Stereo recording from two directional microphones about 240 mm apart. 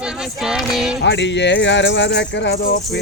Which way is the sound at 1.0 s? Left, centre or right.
Left.